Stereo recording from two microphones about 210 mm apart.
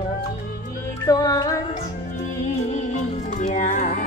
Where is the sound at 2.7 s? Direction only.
35° left (ahead or behind).